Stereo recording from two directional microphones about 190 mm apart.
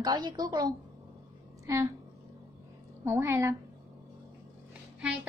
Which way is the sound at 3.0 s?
15° right (ahead or behind).